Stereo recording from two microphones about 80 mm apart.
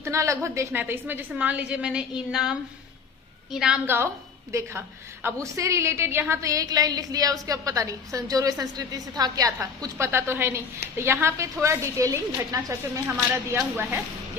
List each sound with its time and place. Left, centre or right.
0.0 s a woman's voice: right
0.8 s a woman's voice: right; by 3.8 s centre
3.8 s a woman's voice: right
13.3 s speech: right